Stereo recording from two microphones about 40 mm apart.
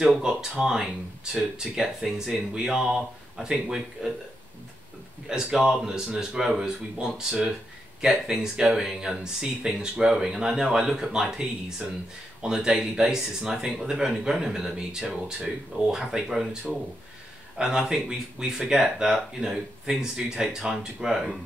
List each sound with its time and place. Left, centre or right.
0.1 s a man's voice: centre
5.3 s a man's voice: centre
9.2 s a man's voice: centre